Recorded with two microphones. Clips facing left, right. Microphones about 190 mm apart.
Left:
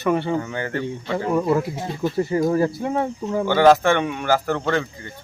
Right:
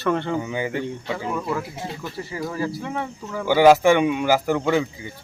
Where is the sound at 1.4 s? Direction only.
20° left (ahead or behind).